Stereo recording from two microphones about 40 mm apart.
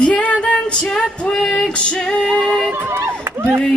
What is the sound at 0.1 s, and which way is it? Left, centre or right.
Female singing, left.